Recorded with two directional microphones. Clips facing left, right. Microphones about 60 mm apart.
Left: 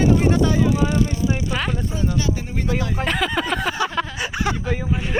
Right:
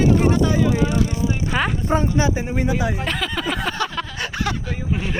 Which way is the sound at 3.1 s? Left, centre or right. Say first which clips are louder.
Left 3 dB; centre.